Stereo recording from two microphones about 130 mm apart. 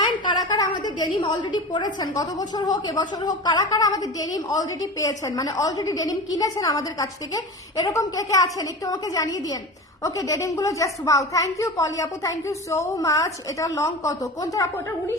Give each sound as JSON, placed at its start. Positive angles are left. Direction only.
{"t": 0.0, "sound": "a woman's voice", "side_deg": 35}